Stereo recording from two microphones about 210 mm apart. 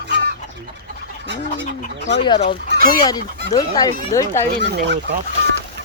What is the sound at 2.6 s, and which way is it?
Speech, 55° right (ahead or behind).